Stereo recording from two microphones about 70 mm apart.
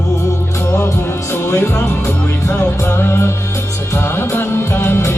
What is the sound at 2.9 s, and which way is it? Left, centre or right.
Music, left.